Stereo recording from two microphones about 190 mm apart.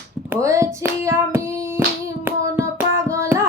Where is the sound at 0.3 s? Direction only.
15° right (ahead or behind).